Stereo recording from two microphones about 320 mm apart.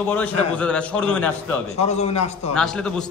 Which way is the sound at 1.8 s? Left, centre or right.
Centre.